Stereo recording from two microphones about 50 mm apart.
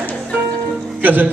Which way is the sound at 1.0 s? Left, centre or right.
Right.